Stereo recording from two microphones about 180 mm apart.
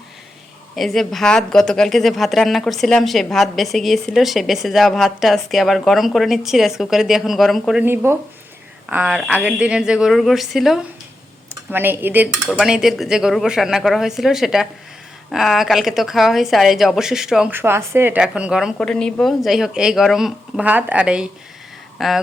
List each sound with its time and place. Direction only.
0.8 s speech: centre (ahead or behind)